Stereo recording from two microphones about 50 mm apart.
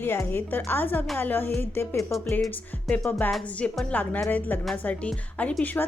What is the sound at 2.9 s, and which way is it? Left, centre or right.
A woman's voice, left.